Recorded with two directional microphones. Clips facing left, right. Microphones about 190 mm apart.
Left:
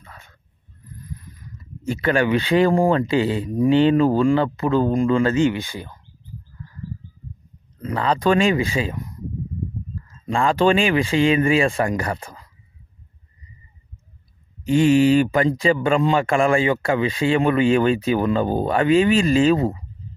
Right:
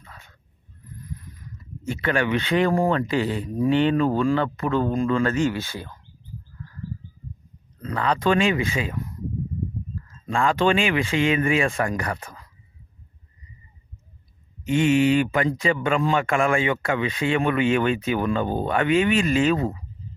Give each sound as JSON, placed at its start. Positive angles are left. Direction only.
{"t": 1.9, "sound": "speech", "side_deg": 35}
{"t": 7.8, "sound": "speech", "side_deg": 30}
{"t": 10.2, "sound": "speech", "side_deg": 30}
{"t": 14.6, "sound": "speech", "side_deg": 35}